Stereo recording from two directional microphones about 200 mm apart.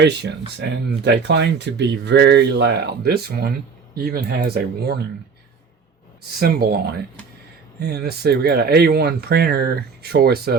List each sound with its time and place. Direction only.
0.0 s speech: 60° right (ahead or behind)
6.4 s speech: 50° right (ahead or behind)
7.8 s speech: 55° right (ahead or behind)